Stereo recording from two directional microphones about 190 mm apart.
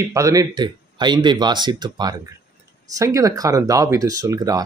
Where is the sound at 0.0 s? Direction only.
15° right (ahead or behind).